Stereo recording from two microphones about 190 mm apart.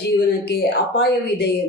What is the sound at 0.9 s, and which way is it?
Speech, 65° left (ahead or behind).